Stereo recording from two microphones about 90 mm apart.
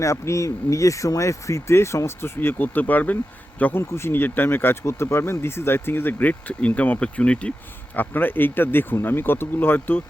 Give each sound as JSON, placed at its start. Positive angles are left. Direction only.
{"t": 0.0, "sound": "speech", "side_deg": 35}